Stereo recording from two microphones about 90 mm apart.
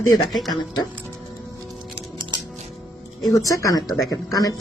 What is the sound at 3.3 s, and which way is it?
Speech, 40° left (ahead or behind).